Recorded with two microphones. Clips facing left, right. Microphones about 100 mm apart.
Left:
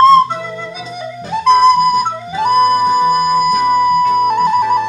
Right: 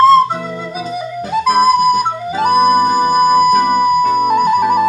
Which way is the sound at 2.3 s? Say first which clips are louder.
Even; 45° right (ahead or behind).